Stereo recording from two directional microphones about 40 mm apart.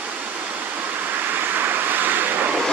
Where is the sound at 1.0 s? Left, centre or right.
Right.